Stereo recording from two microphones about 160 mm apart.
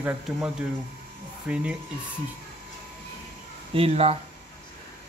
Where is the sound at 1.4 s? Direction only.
5° right (ahead or behind).